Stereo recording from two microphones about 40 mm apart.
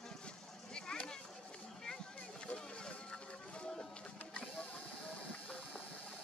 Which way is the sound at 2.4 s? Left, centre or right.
Left.